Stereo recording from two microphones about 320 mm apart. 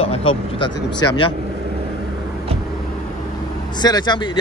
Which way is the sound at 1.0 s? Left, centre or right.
Centre.